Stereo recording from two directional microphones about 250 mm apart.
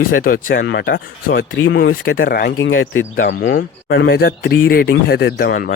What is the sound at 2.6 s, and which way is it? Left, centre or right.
Speech, left.